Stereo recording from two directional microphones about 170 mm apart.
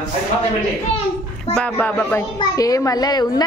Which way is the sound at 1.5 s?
5° left (ahead or behind).